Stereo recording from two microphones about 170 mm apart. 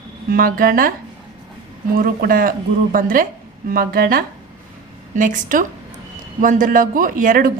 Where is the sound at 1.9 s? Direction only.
60° right (ahead or behind).